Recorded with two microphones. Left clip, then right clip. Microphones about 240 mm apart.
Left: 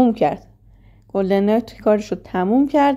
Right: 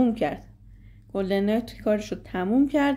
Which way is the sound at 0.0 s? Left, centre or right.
Centre.